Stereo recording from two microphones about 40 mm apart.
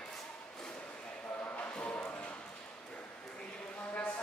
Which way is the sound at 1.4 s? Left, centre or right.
Left.